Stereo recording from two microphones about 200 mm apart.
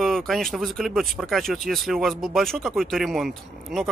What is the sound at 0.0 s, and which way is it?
Speech, centre (ahead or behind).